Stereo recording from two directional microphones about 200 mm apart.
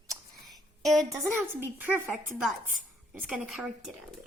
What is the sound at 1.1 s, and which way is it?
Speech, 10° right (ahead or behind).